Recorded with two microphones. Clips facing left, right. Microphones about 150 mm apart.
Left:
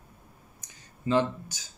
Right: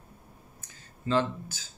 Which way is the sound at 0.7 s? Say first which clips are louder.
Left 2 dB; 15° left (ahead or behind).